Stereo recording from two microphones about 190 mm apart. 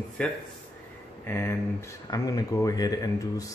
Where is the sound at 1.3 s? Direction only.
15° left (ahead or behind).